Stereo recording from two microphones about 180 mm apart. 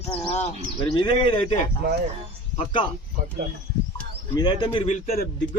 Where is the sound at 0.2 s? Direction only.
35° left (ahead or behind).